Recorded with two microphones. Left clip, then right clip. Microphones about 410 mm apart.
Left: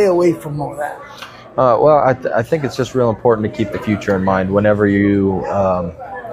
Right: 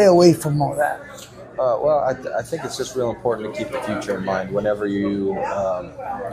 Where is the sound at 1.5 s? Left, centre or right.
Left.